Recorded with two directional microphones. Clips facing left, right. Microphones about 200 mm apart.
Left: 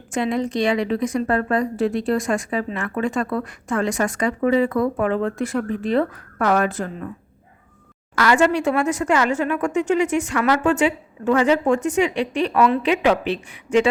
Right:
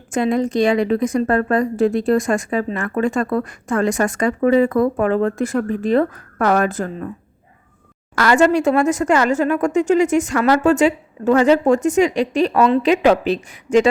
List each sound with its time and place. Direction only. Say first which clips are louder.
0.1 s a woman's voice: right 4 dB; 45° right (ahead or behind)
8.1 s speech: right 3 dB; 45° right (ahead or behind)